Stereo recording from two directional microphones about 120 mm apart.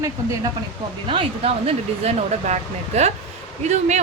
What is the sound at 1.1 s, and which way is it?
Speech, 50° right (ahead or behind).